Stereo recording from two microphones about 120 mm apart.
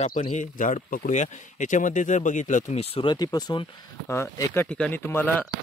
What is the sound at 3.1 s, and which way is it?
Speech, 35° left (ahead or behind).